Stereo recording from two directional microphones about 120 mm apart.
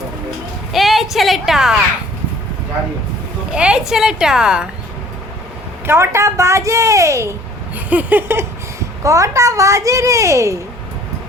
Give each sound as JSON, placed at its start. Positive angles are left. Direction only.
{"t": 0.7, "sound": "a sound", "side_deg": 0}
{"t": 3.5, "sound": "a woman's voice", "side_deg": -10}
{"t": 5.8, "sound": "speech", "side_deg": -20}
{"t": 7.9, "sound": "a woman's voice", "side_deg": -15}